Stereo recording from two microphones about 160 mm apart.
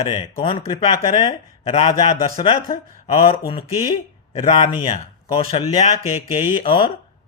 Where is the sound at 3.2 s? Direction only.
35° left (ahead or behind).